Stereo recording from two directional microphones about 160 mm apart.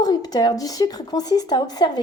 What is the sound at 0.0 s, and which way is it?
Speech, 25° left (ahead or behind).